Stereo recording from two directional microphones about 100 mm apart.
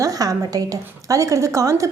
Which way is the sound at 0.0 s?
35° right (ahead or behind).